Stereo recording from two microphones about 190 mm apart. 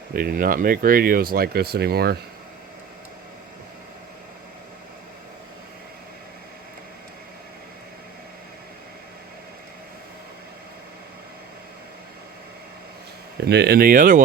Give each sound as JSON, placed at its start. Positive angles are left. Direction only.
{"t": 0.1, "sound": "speech", "side_deg": -50}
{"t": 13.4, "sound": "speech", "side_deg": -60}